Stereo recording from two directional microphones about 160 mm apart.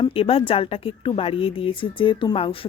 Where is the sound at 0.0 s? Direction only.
35° left (ahead or behind).